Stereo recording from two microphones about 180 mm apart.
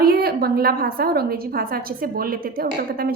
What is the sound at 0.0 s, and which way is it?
A woman's voice, 60° right (ahead or behind).